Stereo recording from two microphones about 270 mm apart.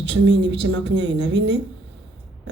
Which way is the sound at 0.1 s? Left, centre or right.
Right.